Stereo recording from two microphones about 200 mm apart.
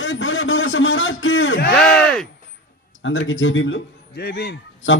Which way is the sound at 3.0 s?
70° left (ahead or behind).